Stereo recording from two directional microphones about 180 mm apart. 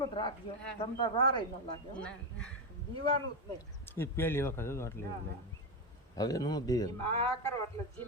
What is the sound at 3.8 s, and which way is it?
Speech, 10° left (ahead or behind).